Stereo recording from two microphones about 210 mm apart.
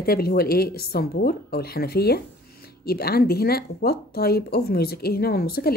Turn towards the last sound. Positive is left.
turn(degrees=45)  # may be behind; listen again after turning